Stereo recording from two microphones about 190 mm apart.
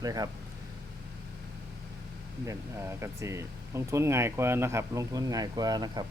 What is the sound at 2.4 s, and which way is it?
Speech, 15° right (ahead or behind).